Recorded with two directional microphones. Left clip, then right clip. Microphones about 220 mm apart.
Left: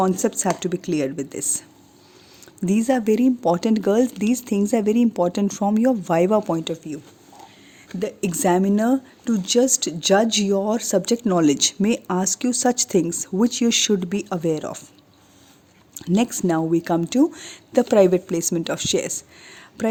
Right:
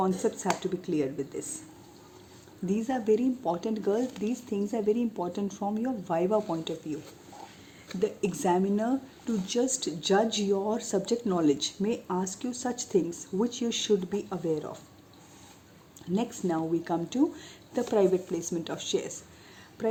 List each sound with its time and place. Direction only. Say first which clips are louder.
0.0 s speech: left 8 dB; 50° left (ahead or behind)
2.6 s speech: left 7 dB; 50° left (ahead or behind)
16.0 s speech: left 10 dB; 50° left (ahead or behind)